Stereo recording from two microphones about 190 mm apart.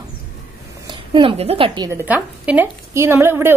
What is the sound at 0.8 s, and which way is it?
A woman's voice, 25° right (ahead or behind).